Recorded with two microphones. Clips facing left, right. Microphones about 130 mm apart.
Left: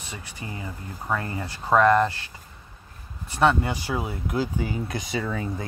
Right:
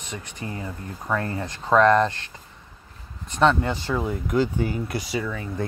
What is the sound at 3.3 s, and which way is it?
Speech, 10° left (ahead or behind).